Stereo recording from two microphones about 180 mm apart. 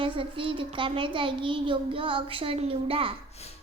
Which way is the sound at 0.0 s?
30° right (ahead or behind).